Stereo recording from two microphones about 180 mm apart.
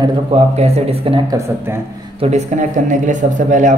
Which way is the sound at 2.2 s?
40° right (ahead or behind).